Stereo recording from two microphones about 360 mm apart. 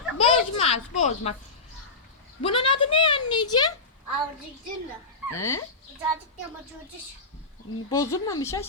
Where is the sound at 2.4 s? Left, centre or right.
Centre.